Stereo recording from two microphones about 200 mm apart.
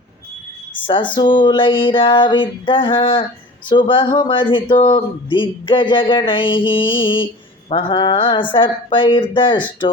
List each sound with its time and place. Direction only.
0.9 s speech: 25° left (ahead or behind)